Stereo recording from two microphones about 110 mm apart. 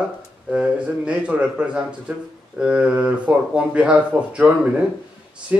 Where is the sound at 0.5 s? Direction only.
10° right (ahead or behind).